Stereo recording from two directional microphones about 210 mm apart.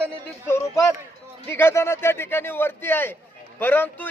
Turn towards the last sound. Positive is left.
turn(degrees=10)  # may be behind; listen again after turning